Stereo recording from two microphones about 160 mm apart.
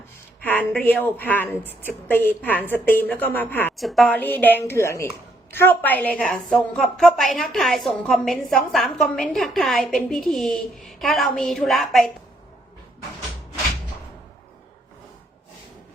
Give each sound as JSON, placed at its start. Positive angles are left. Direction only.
{"t": 0.4, "sound": "a woman's voice", "side_deg": 10}
{"t": 3.8, "sound": "a woman's voice", "side_deg": 0}
{"t": 4.1, "sound": "a woman's voice", "side_deg": 10}